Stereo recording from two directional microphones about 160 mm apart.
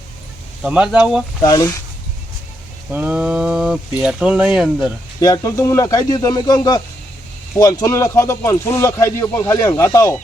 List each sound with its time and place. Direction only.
0.6 s speech: 5° right (ahead or behind)
1.4 s speech: 25° left (ahead or behind)
2.9 s speech: 10° right (ahead or behind)
5.2 s speech: 20° left (ahead or behind)